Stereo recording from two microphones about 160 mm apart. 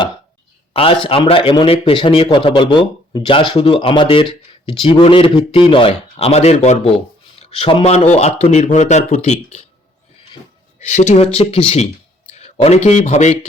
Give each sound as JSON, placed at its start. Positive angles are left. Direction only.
{"t": 0.7, "sound": "a man's voice", "side_deg": 35}
{"t": 7.9, "sound": "speech", "side_deg": 45}
{"t": 10.8, "sound": "speech", "side_deg": 45}